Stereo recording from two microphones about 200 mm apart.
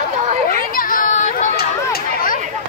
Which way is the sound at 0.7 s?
45° left (ahead or behind).